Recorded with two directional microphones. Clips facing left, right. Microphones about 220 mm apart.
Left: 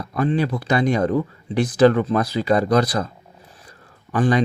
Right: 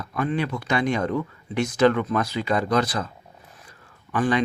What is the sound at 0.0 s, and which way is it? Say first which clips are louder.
Speech: left 5 dB; 35° left (ahead or behind).